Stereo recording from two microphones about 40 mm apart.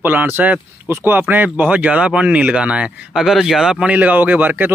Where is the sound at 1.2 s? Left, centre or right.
Right.